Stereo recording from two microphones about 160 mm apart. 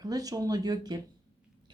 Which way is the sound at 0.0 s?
25° right (ahead or behind).